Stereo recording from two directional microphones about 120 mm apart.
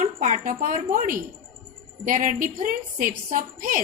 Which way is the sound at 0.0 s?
90° right.